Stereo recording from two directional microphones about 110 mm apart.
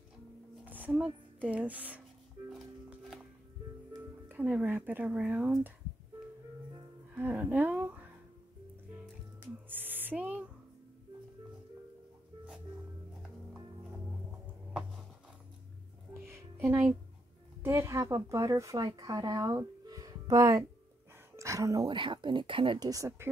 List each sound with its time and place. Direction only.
0.7 s speech: 15° right (ahead or behind)
4.3 s speech: 15° right (ahead or behind)
7.2 s speech: 15° right (ahead or behind)
9.7 s owl: 15° right (ahead or behind)
14.4 s music: 10° right (ahead or behind)
16.1 s music: 25° right (ahead or behind)
18.3 s speech: 30° right (ahead or behind)
21.4 s a sound: 30° right (ahead or behind)
21.8 s speech: 45° right (ahead or behind)
22.8 s speech: 30° right (ahead or behind)